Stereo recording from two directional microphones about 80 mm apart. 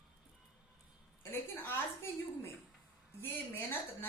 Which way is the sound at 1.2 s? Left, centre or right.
Left.